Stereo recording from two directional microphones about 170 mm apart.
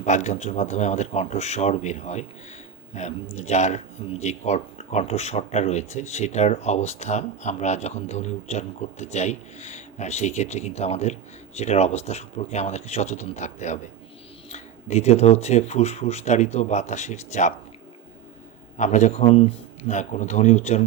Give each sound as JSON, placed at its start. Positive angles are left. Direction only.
{"t": 0.0, "sound": "speech", "side_deg": 45}
{"t": 18.8, "sound": "a man's voice", "side_deg": 45}